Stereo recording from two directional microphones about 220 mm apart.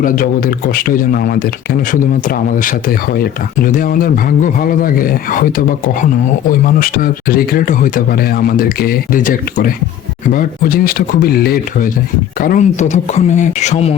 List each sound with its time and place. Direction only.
0.0 s speech: 40° left (ahead or behind)